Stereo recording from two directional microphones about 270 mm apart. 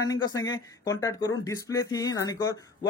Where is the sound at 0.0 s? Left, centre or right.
Centre.